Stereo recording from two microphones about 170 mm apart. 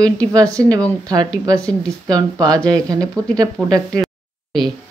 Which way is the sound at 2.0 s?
20° right (ahead or behind).